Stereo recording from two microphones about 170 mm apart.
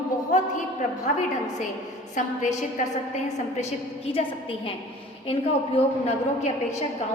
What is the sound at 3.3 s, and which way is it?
A woman's voice, 40° left (ahead or behind).